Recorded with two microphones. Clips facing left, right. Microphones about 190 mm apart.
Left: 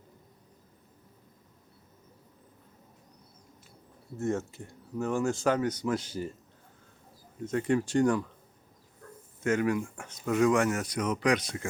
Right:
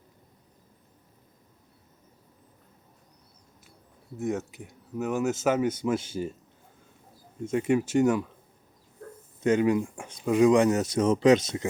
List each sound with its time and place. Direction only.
4.3 s speech: 15° right (ahead or behind)
7.4 s speech: 10° right (ahead or behind)
9.4 s speech: 20° right (ahead or behind)